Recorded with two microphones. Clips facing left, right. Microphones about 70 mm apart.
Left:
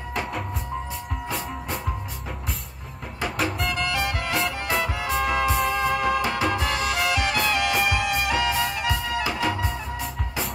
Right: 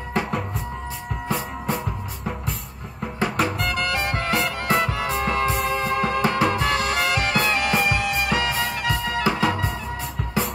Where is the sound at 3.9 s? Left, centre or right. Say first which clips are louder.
Right 2 dB; right.